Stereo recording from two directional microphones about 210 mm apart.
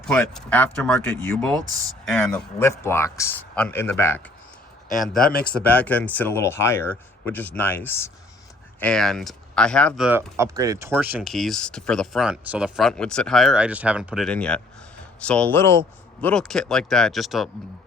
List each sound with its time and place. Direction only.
0.0 s speech: 5° left (ahead or behind)
4.9 s speech: centre (ahead or behind)
5.3 s speech: 45° left (ahead or behind)
5.5 s speech: 5° left (ahead or behind)
10.3 s speech: 15° right (ahead or behind)